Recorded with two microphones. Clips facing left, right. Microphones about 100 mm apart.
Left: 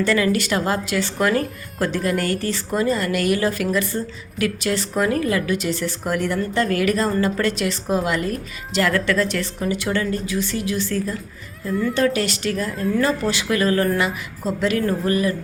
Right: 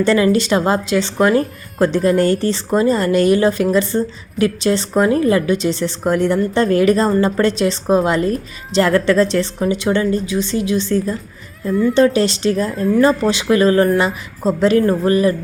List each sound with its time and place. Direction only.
0.0 s speech: 25° right (ahead or behind)
11.7 s speech: centre (ahead or behind)
11.9 s speech: 25° right (ahead or behind)